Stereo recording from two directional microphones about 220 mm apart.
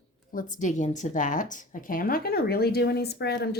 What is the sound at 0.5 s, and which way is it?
A woman's voice, 35° left (ahead or behind).